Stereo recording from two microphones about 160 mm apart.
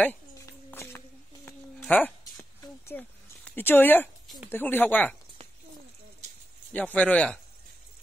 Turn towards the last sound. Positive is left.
turn(degrees=10)  # may be behind; listen again after turning